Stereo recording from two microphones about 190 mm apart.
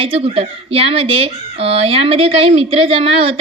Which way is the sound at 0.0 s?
30° right (ahead or behind).